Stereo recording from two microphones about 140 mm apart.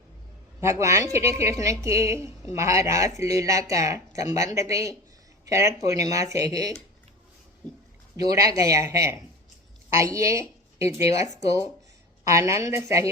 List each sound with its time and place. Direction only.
0.6 s a woman's voice: 20° right (ahead or behind)
8.1 s a woman's voice: 25° right (ahead or behind)